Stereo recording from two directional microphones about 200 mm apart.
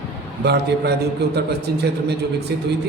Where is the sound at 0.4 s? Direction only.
55° right (ahead or behind).